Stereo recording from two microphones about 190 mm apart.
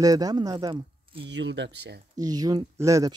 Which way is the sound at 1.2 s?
65° right (ahead or behind).